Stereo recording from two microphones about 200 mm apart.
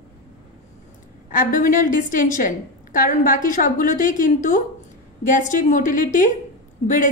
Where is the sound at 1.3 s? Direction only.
40° left (ahead or behind).